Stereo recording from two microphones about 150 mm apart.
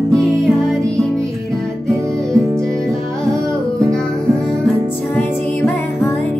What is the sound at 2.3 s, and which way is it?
Music, 20° right (ahead or behind).